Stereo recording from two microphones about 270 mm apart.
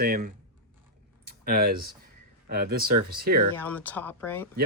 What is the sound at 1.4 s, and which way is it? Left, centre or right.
Speech, right.